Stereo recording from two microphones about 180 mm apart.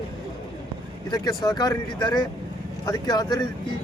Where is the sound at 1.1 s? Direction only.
25° left (ahead or behind).